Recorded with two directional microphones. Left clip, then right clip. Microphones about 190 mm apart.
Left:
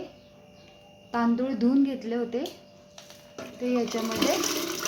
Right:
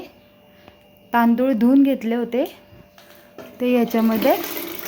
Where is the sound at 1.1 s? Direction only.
50° right (ahead or behind).